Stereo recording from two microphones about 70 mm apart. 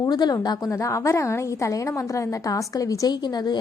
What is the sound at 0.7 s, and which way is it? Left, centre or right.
A woman's voice, left.